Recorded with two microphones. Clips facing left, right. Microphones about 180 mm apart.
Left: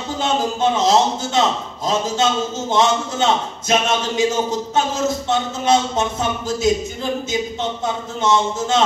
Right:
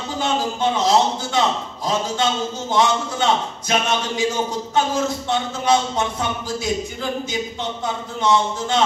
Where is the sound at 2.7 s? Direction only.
25° left (ahead or behind).